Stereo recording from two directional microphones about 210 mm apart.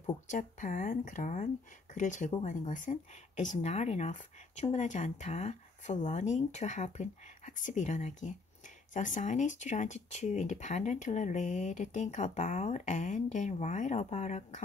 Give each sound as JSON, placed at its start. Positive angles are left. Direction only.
{"t": 0.0, "sound": "speech", "side_deg": 35}